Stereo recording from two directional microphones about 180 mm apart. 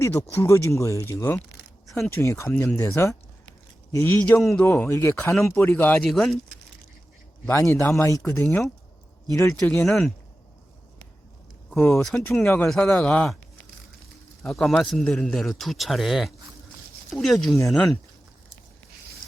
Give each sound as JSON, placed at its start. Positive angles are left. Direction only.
{"t": 0.0, "sound": "a man's voice", "side_deg": 15}
{"t": 7.5, "sound": "speech", "side_deg": 15}
{"t": 11.9, "sound": "a man's voice", "side_deg": 0}
{"t": 14.4, "sound": "a man's voice", "side_deg": 5}